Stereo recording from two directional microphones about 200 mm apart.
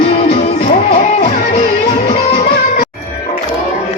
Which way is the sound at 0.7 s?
45° left (ahead or behind).